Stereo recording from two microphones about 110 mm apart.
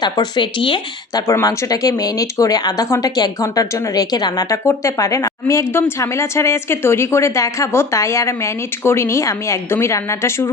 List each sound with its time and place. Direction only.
0.0 s speech: 40° left (ahead or behind)
1.1 s a woman's voice: 30° left (ahead or behind)